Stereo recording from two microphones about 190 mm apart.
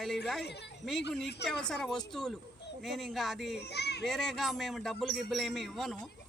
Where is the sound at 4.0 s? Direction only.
Centre (ahead or behind).